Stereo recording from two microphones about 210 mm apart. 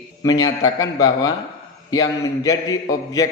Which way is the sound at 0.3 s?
15° left (ahead or behind).